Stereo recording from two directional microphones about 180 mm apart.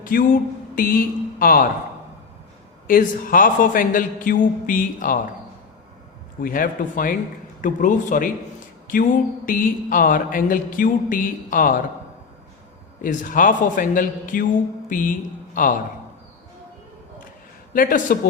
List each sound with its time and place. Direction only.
0.0 s a man's voice: 50° left (ahead or behind)
2.8 s a man's voice: 50° left (ahead or behind)
6.4 s a man's voice: 50° left (ahead or behind)
9.5 s a man's voice: 50° left (ahead or behind)
13.0 s a man's voice: 50° left (ahead or behind)
17.7 s a man's voice: 50° left (ahead or behind)